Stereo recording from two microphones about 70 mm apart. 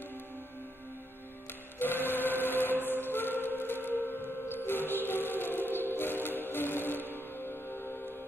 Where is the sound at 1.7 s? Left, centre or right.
Left.